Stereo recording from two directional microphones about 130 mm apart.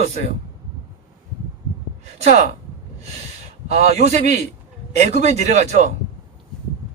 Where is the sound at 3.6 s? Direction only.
65° right (ahead or behind).